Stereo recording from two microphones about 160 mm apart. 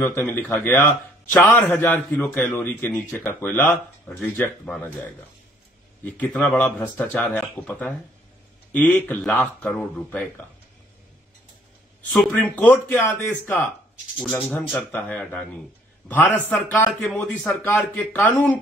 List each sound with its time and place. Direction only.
0.0 s a man's voice: 15° left (ahead or behind)
6.0 s a man's voice: 10° left (ahead or behind)
12.1 s a man's voice: 5° left (ahead or behind)